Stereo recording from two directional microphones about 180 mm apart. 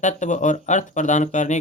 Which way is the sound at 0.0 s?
45° left (ahead or behind).